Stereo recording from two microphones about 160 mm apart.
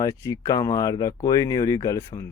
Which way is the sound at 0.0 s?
20° left (ahead or behind).